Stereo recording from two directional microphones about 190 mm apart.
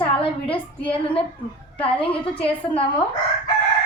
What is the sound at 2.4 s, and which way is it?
Speech, 30° left (ahead or behind).